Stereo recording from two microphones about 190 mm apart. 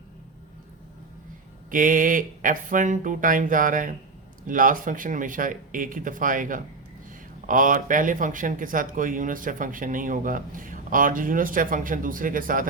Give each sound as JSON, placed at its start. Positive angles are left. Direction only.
{"t": 1.7, "sound": "speech", "side_deg": -45}